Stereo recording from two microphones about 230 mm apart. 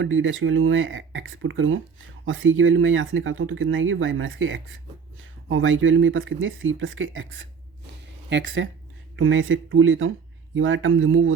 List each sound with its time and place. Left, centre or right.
0.0 s speech: right
8.0 s a sound: right
9.1 s speech: right